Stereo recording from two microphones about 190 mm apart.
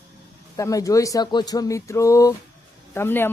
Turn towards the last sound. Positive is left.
turn(degrees=10)  # may be behind; listen again after turning